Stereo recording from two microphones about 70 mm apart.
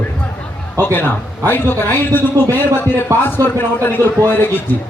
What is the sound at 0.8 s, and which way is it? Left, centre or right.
A man's voice, left.